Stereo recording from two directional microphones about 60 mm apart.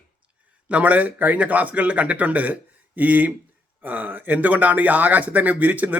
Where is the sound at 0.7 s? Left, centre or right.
Right.